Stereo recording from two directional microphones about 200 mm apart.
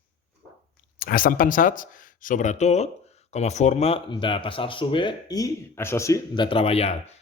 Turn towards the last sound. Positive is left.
turn(degrees=30)  # may be behind; listen again after turning